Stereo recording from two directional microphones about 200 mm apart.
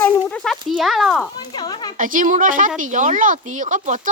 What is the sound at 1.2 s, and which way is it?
Speech, 20° left (ahead or behind).